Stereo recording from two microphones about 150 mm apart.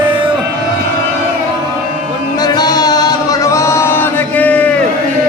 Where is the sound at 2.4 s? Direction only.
25° left (ahead or behind); by 4.7 s 10° left (ahead or behind).